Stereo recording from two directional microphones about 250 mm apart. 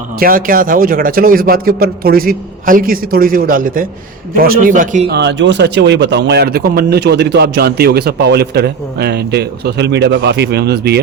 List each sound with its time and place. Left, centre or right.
0.2 s speech: right